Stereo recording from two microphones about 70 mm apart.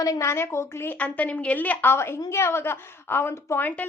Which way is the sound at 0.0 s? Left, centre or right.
Left.